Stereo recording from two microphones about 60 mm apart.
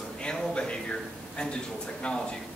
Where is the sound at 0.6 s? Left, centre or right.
Centre.